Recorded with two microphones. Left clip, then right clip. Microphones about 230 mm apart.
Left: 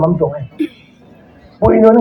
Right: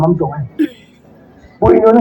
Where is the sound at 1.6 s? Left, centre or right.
Left.